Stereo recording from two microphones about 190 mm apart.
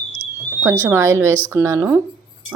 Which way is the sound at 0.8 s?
15° right (ahead or behind).